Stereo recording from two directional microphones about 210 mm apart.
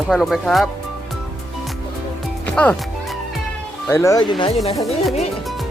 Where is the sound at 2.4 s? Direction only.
5° left (ahead or behind).